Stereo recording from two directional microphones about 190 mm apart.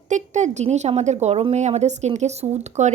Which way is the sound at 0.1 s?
40° right (ahead or behind).